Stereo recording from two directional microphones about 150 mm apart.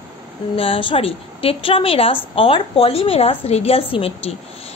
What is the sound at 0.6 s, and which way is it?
A woman's voice, 35° left (ahead or behind).